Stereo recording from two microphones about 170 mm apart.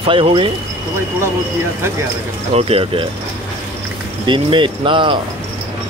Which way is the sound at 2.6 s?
35° right (ahead or behind).